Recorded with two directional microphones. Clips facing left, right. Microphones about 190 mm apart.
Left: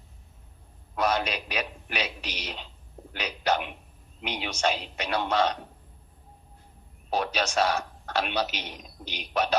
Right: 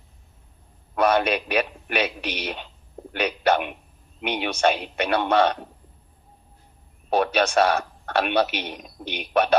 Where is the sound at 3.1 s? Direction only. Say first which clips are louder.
Right 6 dB; 60° right (ahead or behind).